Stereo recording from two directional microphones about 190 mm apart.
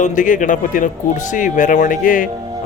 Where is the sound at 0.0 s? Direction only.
40° left (ahead or behind).